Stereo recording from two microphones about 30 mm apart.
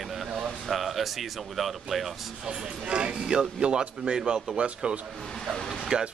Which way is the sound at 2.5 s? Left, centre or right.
Right.